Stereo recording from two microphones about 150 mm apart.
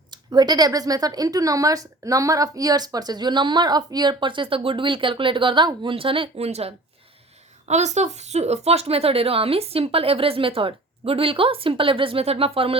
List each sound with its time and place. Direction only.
0.1 s speech: 25° right (ahead or behind)